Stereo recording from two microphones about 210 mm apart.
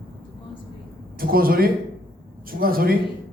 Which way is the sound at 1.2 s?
45° right (ahead or behind).